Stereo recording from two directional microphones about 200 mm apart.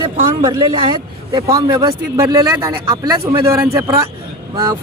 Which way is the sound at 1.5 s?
15° right (ahead or behind).